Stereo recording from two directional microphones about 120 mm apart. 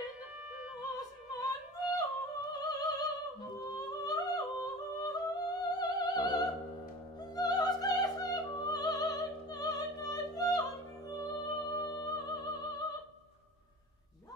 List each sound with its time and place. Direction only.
0.9 s opera: 35° left (ahead or behind)
3.7 s humming: 30° left (ahead or behind)
7.3 s opera: 35° left (ahead or behind)